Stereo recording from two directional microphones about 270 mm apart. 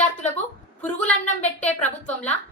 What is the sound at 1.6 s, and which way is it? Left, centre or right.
Speech, centre.